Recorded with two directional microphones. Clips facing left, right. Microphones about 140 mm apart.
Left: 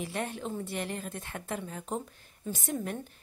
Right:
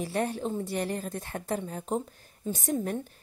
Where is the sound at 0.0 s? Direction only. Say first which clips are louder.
Right 5 dB; 40° right (ahead or behind).